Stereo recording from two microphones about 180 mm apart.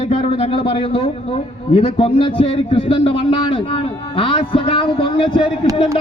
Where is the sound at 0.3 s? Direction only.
30° left (ahead or behind).